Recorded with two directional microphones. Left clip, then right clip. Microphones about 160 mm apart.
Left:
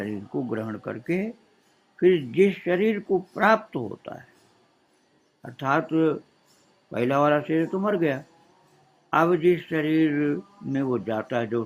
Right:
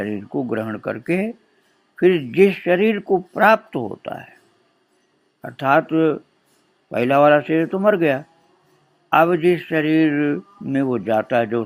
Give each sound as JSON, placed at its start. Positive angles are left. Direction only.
{"t": 0.0, "sound": "a man's voice", "side_deg": -30}
{"t": 5.4, "sound": "a man's voice", "side_deg": -30}